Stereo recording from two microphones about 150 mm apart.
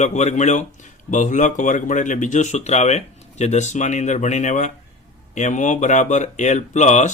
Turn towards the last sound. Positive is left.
turn(degrees=55)  # may be behind; listen again after turning